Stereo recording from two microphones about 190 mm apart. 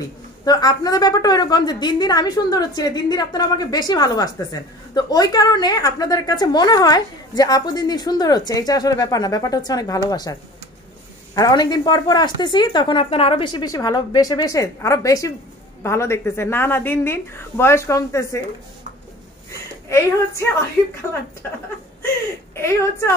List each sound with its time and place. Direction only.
0.5 s a woman's voice: 20° left (ahead or behind)
11.3 s a woman's voice: 20° left (ahead or behind)
22.6 s a woman's voice: 15° left (ahead or behind)